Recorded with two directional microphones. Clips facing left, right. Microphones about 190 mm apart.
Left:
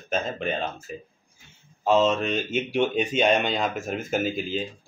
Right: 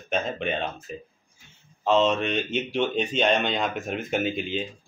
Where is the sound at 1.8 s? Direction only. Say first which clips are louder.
Left 1 dB; 5° left (ahead or behind).